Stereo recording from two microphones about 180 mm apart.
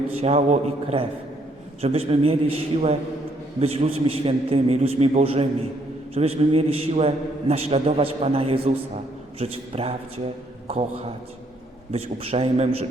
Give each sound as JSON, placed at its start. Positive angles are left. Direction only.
{"t": 0.2, "sound": "a man's voice", "side_deg": -35}